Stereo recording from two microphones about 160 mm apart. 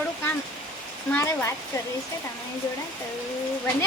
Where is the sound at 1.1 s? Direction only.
15° left (ahead or behind).